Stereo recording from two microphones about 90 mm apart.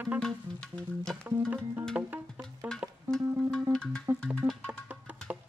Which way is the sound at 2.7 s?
5° left (ahead or behind).